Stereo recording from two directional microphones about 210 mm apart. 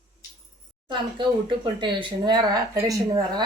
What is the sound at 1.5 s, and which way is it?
Speech, 20° right (ahead or behind).